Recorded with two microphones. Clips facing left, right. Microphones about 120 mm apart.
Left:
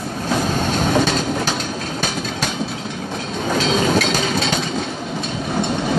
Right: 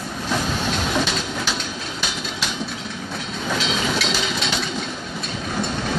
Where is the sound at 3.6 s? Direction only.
40° left (ahead or behind).